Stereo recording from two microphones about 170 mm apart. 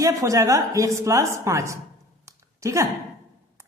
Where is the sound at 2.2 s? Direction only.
15° right (ahead or behind).